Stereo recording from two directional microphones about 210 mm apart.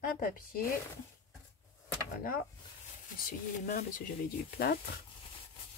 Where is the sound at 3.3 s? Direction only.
40° left (ahead or behind).